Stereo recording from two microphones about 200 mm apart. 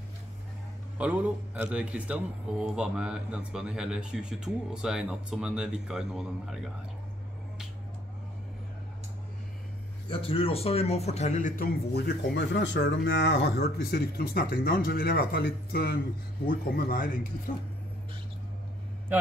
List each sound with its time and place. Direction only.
0.9 s a man's voice: 5° right (ahead or behind)
10.0 s speech: 25° left (ahead or behind); by 17.1 s 45° left (ahead or behind)